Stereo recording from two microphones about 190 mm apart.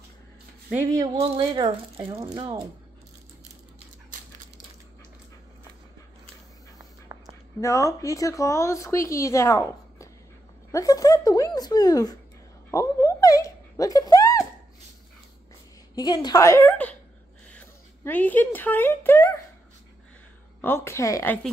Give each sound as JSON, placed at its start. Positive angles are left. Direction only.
{"t": 0.9, "sound": "speech", "side_deg": -25}
{"t": 7.1, "sound": "a sound", "side_deg": -15}
{"t": 7.6, "sound": "speech", "side_deg": 15}
{"t": 15.9, "sound": "speech", "side_deg": 20}
{"t": 20.6, "sound": "speech", "side_deg": 15}